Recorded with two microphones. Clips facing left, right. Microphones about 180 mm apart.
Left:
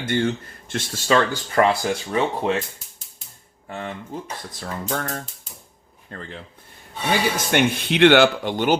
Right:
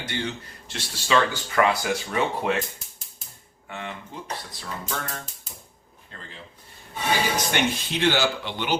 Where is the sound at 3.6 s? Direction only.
40° left (ahead or behind).